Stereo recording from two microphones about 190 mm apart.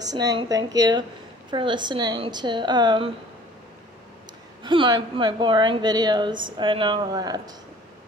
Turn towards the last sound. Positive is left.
turn(degrees=-20)  # may be behind; listen again after turning